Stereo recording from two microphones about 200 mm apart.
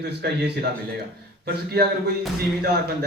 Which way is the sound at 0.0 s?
55° right (ahead or behind).